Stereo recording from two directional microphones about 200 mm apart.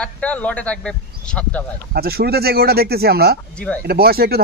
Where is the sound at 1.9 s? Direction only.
50° right (ahead or behind).